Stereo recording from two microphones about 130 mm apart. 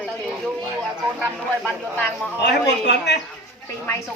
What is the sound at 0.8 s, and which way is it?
Speech, 10° left (ahead or behind).